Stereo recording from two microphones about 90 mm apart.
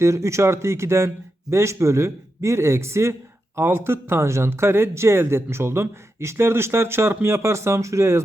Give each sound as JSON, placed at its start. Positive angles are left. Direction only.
{"t": 0.0, "sound": "speech", "side_deg": -35}